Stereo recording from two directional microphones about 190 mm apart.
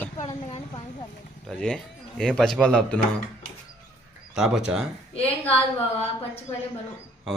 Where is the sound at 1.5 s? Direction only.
5° left (ahead or behind).